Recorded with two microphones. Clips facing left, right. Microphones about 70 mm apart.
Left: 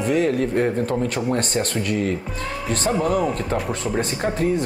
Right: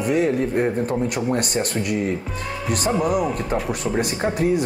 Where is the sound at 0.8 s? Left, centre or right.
Right.